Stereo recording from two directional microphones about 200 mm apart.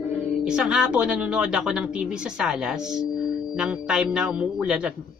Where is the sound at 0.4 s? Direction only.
5° right (ahead or behind).